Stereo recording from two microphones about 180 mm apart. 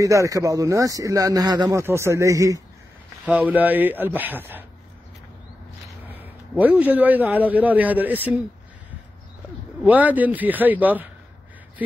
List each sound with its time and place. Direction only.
0.0 s a man's voice: 15° right (ahead or behind)
6.0 s a man's voice: 10° right (ahead or behind)
9.8 s a man's voice: 10° right (ahead or behind)